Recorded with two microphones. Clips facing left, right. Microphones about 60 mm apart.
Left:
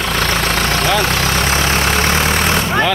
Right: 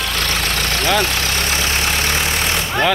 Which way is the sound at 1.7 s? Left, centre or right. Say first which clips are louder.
Left 4 dB; left.